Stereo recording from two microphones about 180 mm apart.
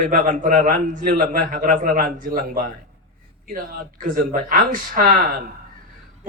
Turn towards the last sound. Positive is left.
turn(degrees=-50)  # may be behind; listen again after turning